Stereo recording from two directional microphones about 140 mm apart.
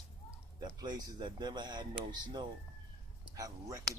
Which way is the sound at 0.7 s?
30° right (ahead or behind).